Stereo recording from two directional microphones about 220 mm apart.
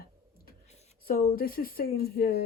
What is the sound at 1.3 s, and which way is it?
Speech, 40° left (ahead or behind).